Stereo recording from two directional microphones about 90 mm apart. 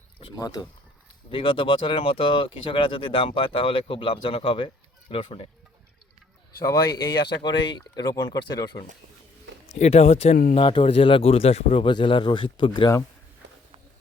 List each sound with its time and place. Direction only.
0.3 s speech: 45° left (ahead or behind)
1.3 s speech: 75° left (ahead or behind)
6.6 s speech: 50° left (ahead or behind)
8.4 s speech: 55° left (ahead or behind)
10.5 s speech: 75° left (ahead or behind)